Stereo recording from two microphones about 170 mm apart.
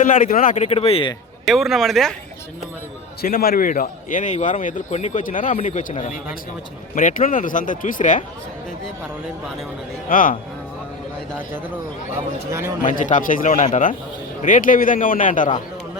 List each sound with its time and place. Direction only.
0.0 s a man's voice: 50° left (ahead or behind); by 1.1 s 35° left (ahead or behind)
1.5 s speech: centre (ahead or behind)
3.2 s a man's voice: 60° left (ahead or behind)
10.1 s a man's voice: 55° left (ahead or behind)
12.1 s speech: 15° right (ahead or behind)
12.8 s a man's voice: 50° left (ahead or behind)